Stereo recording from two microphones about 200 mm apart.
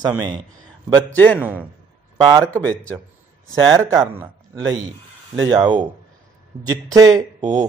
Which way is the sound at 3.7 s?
15° right (ahead or behind).